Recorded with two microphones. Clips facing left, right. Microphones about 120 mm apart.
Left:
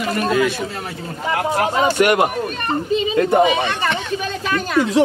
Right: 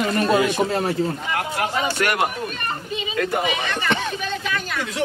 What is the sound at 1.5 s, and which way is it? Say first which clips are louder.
Speech: left 7 dB; 45° left (ahead or behind).